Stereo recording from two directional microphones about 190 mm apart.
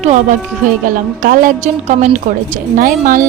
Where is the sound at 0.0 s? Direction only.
40° right (ahead or behind).